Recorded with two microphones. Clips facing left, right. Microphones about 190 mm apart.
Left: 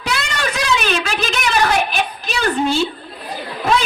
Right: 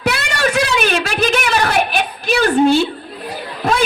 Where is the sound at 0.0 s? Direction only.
60° right (ahead or behind).